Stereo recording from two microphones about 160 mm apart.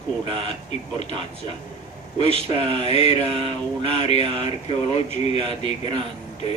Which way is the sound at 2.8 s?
40° left (ahead or behind).